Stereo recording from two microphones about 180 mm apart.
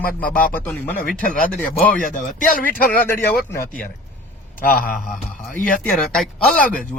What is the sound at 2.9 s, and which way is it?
Speech, 10° left (ahead or behind).